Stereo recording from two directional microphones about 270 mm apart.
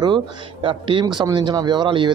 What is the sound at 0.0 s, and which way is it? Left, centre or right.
Speech, centre.